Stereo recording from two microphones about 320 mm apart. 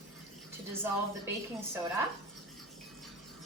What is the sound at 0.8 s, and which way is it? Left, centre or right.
Speech, centre.